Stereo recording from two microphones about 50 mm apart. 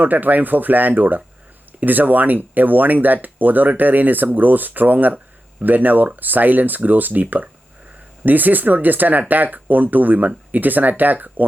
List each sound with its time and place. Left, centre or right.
0.0 s speech: right